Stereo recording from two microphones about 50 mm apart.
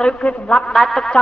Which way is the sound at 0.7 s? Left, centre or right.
Centre.